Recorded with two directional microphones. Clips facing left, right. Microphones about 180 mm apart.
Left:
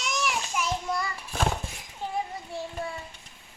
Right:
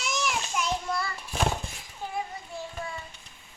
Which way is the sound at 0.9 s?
15° left (ahead or behind).